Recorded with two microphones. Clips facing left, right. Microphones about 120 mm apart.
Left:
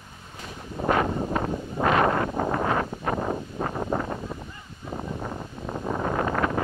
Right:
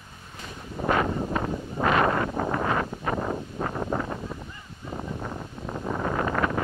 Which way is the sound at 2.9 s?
15° left (ahead or behind).